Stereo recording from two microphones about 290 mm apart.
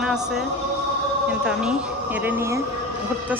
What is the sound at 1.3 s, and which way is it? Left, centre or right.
Speech, centre.